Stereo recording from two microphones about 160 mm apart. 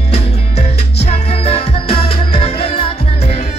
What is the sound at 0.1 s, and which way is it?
Music, 40° left (ahead or behind).